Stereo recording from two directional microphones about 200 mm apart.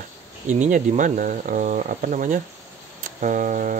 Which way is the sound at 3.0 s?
40° right (ahead or behind).